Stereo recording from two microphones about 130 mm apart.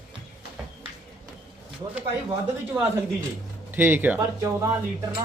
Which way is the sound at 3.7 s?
15° right (ahead or behind).